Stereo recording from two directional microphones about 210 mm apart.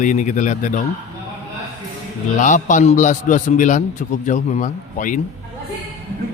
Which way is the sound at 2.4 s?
35° left (ahead or behind).